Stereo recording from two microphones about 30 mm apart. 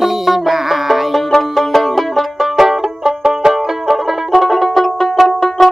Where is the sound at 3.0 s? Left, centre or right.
Centre.